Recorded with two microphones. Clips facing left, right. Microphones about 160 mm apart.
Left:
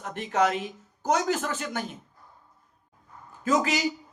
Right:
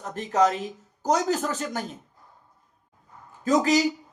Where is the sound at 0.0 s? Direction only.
35° right (ahead or behind).